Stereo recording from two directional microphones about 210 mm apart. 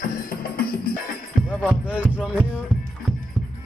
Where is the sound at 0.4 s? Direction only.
45° left (ahead or behind).